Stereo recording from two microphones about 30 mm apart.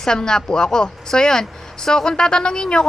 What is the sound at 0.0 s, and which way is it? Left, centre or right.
Speech, left.